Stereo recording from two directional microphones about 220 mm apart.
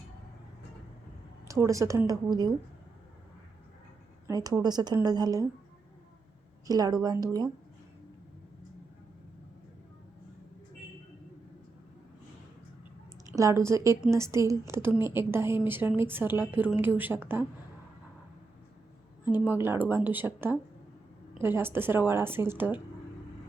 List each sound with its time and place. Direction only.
1.5 s a woman's voice: 15° right (ahead or behind)
4.3 s a woman's voice: 15° right (ahead or behind)
6.7 s a woman's voice: 15° right (ahead or behind)
13.2 s a woman's voice: 15° right (ahead or behind)
19.2 s a woman's voice: 10° right (ahead or behind)